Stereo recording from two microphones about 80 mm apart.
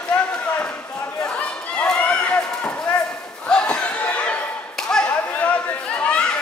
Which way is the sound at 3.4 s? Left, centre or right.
Centre.